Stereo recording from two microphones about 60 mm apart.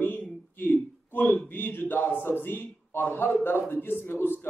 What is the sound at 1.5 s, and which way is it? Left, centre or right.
A man's voice, left.